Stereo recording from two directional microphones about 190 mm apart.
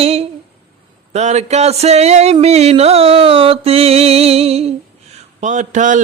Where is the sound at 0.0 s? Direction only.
30° right (ahead or behind).